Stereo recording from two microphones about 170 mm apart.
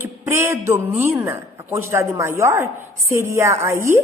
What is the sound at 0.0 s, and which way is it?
Speech, 15° right (ahead or behind).